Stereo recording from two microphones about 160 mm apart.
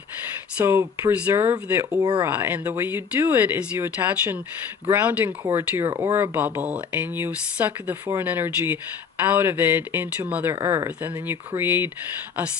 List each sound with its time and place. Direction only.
0.5 s speech: 15° right (ahead or behind)
2.3 s speech: 15° right (ahead or behind)